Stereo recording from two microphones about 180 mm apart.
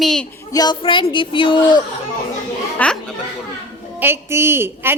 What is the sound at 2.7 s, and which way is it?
Speech, 5° left (ahead or behind).